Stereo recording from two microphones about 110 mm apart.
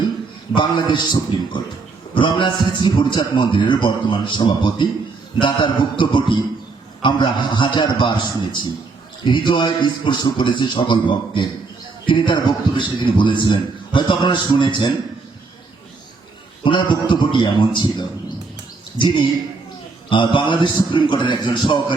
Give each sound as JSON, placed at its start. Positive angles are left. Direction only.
{"t": 0.5, "sound": "a man's voice", "side_deg": 45}
{"t": 9.2, "sound": "a man's voice", "side_deg": 45}
{"t": 16.6, "sound": "a man's voice", "side_deg": 45}